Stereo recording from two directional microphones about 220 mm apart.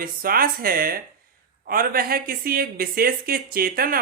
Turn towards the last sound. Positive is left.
turn(degrees=-40)  # may be behind; listen again after turning